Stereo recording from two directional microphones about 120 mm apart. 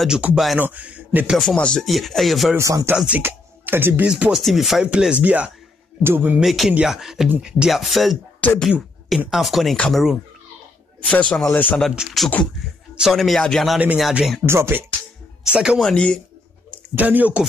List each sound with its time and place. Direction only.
0.0 s a man's voice: 10° right (ahead or behind)
1.3 s speech: 5° left (ahead or behind)
2.5 s speech: 25° right (ahead or behind)
4.1 s speech: 5° right (ahead or behind)
6.4 s speech: centre (ahead or behind)
8.4 s speech: 10° left (ahead or behind)
8.6 s a man's voice: centre (ahead or behind)
11.9 s speech: 5° right (ahead or behind)
14.4 s speech: 20° right (ahead or behind)
15.4 s speech: 5° right (ahead or behind)
15.8 s a man's voice: 10° left (ahead or behind)
16.9 s speech: 15° right (ahead or behind)